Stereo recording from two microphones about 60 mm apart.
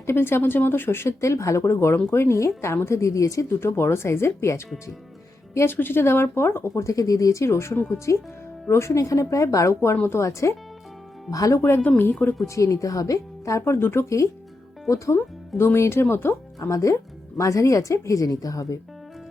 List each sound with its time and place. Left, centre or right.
0.0 s speech: left
3.6 s speech: left
5.7 s speech: left
9.8 s speech: left
11.3 s speech: left
11.8 s speech: left
12.5 s speech: left
16.6 s speech: left